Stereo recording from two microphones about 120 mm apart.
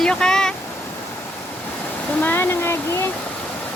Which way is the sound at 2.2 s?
20° left (ahead or behind).